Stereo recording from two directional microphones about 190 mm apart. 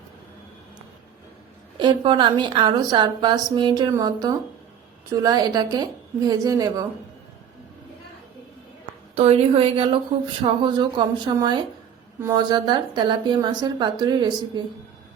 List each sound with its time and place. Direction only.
1.8 s a woman's voice: 25° right (ahead or behind)
9.1 s a woman's voice: 30° right (ahead or behind)